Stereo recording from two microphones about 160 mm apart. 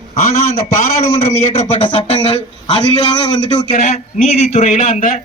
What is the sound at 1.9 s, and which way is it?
Speech, 40° left (ahead or behind).